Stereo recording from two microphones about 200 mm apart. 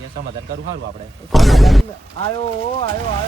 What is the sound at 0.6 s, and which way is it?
Speech, 65° right (ahead or behind).